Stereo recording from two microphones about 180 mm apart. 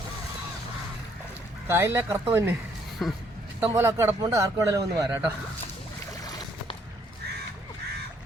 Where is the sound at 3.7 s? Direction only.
15° right (ahead or behind).